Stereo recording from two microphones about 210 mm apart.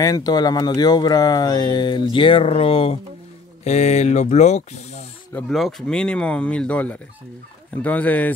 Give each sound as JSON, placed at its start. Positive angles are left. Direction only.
{"t": 0.0, "sound": "speech", "side_deg": 20}
{"t": 5.3, "sound": "speech", "side_deg": 0}